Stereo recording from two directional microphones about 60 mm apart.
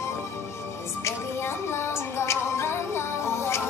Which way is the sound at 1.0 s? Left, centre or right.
Left.